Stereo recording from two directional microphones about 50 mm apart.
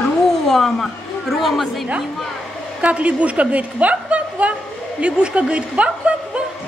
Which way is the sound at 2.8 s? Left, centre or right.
Right.